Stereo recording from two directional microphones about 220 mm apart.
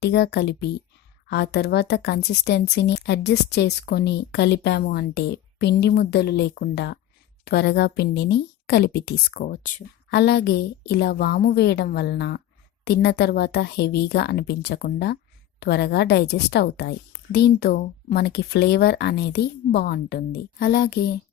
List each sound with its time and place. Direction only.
0.0 s a woman's voice: 50° left (ahead or behind)